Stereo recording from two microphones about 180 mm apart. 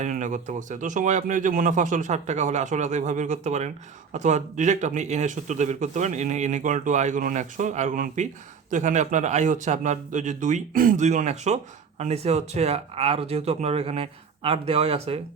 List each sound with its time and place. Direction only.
0.0 s a man's voice: 45° right (ahead or behind)